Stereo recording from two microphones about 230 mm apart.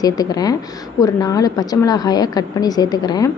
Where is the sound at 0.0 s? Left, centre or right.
Centre.